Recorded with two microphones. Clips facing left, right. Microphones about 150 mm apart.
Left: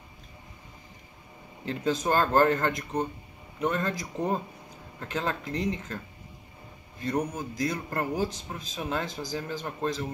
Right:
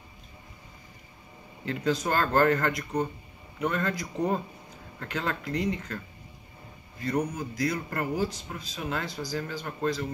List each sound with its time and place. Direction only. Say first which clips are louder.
1.7 s speech: left 1 dB; 20° left (ahead or behind)
7.1 s speech: even; 20° left (ahead or behind)